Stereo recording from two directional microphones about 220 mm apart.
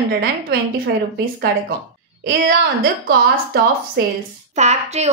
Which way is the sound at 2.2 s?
40° right (ahead or behind).